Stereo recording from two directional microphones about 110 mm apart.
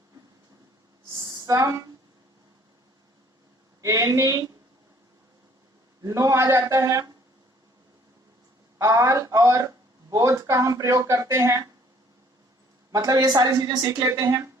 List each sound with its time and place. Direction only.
1.2 s a sound: 35° right (ahead or behind)
3.8 s speech: 30° right (ahead or behind)
6.0 s speech: 30° right (ahead or behind)
8.8 s speech: 30° right (ahead or behind)
12.9 s a woman's voice: 35° right (ahead or behind)